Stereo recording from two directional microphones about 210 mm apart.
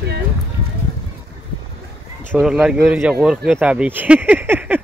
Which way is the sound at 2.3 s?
5° right (ahead or behind).